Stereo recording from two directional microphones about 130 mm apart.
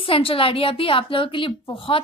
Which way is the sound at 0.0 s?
45° left (ahead or behind).